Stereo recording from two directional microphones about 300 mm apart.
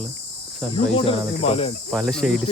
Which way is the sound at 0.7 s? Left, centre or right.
Centre.